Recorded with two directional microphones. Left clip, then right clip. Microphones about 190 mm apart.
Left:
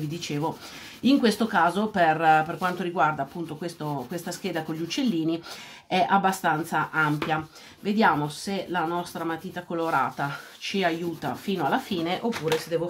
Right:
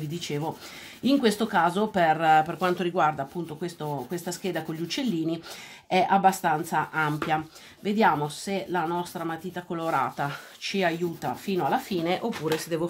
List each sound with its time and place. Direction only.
1.0 s speech: 35° right (ahead or behind)
12.7 s speech: 50° right (ahead or behind)